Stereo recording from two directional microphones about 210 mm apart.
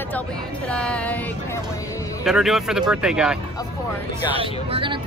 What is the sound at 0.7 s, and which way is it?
Speech, 5° left (ahead or behind).